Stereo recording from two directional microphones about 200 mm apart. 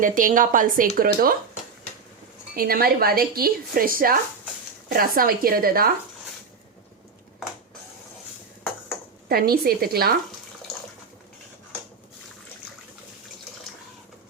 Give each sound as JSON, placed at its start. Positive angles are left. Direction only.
{"t": 0.0, "sound": "speech", "side_deg": -40}
{"t": 2.6, "sound": "speech", "side_deg": -50}
{"t": 9.3, "sound": "speech", "side_deg": -50}